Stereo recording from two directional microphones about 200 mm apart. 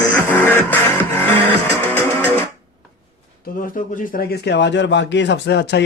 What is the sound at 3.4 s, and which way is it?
A man's voice, 45° left (ahead or behind).